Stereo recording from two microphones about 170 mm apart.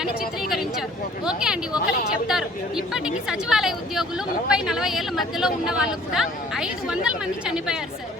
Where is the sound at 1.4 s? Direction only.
5° right (ahead or behind).